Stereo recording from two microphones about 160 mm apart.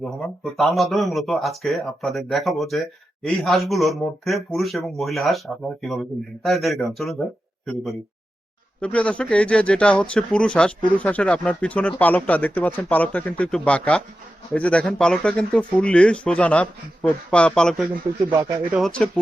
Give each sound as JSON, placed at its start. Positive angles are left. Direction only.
{"t": 0.0, "sound": "speech", "side_deg": 0}
{"t": 8.8, "sound": "speech", "side_deg": 5}
{"t": 18.3, "sound": "speech", "side_deg": -20}
{"t": 18.7, "sound": "speech", "side_deg": 5}